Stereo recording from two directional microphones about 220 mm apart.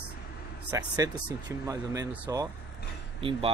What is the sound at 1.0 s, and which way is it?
Speech, 15° right (ahead or behind).